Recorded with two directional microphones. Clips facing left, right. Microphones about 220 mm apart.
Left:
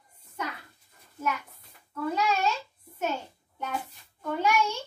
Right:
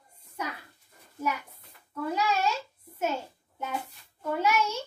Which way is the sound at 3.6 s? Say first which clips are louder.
Even; 5° right (ahead or behind).